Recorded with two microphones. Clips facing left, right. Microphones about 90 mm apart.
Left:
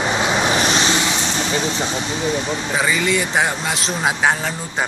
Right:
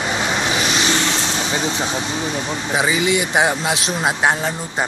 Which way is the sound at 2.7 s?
15° right (ahead or behind).